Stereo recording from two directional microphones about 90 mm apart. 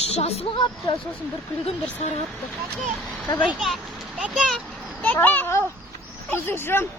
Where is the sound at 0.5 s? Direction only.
65° left (ahead or behind).